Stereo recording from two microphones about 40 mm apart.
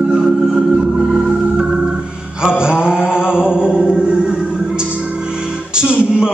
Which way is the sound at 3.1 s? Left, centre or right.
Right.